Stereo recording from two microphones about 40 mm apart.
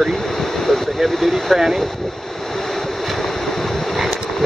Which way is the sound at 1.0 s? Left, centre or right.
Centre.